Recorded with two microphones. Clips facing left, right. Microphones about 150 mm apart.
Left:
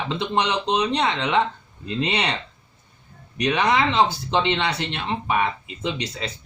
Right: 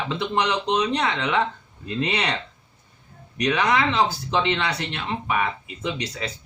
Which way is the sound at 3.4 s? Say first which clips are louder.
Left 1 dB; 25° left (ahead or behind).